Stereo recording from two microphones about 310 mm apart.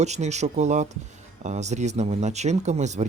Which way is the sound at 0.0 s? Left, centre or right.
Right.